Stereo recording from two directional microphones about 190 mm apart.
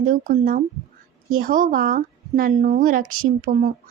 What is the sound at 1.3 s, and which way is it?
Speech, 45° right (ahead or behind).